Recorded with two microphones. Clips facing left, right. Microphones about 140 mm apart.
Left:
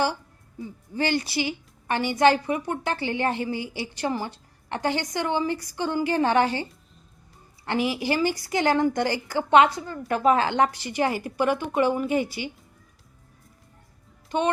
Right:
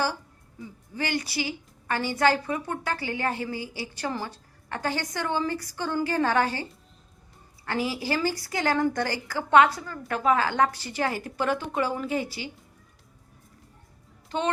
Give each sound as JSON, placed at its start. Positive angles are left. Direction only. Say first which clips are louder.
{"t": 0.9, "sound": "a woman's voice", "louder": "left 4 dB", "side_deg": 30}
{"t": 14.3, "sound": "speech", "louder": "left 3 dB", "side_deg": 15}